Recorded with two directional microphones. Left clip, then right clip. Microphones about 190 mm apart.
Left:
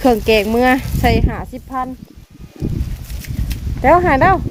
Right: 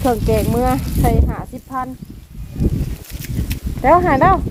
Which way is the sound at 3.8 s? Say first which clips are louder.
Left 1 dB; 10° left (ahead or behind).